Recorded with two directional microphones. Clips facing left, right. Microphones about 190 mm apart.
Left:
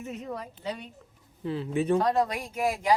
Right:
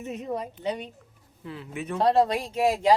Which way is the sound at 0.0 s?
20° right (ahead or behind).